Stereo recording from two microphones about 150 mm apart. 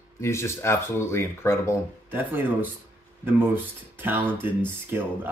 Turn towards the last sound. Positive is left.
turn(degrees=-15)  # may be behind; listen again after turning